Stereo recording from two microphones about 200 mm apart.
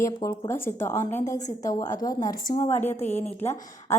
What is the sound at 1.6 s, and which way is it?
A woman's voice, 15° left (ahead or behind).